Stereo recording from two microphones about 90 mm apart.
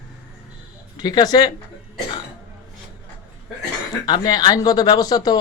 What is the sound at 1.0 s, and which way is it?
Speech, 50° left (ahead or behind).